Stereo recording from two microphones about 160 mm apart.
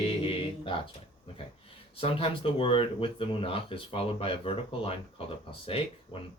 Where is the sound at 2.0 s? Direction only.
35° left (ahead or behind).